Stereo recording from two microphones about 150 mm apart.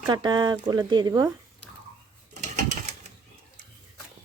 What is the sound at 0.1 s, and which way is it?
Speech, 30° right (ahead or behind).